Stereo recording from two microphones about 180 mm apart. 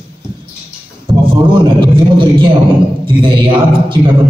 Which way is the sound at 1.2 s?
25° right (ahead or behind).